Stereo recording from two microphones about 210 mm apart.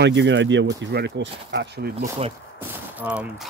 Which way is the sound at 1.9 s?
30° right (ahead or behind).